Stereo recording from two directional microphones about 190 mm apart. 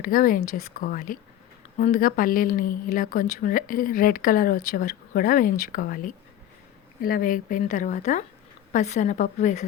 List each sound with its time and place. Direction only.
0.0 s a woman's voice: 45° left (ahead or behind)